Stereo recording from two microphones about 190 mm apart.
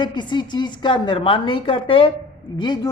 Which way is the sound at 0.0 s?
25° left (ahead or behind).